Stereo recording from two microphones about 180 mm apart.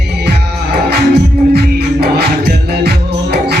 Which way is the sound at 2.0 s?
60° right (ahead or behind).